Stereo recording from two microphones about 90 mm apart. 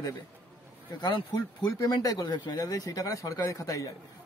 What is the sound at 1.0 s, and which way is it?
Speech, 55° left (ahead or behind).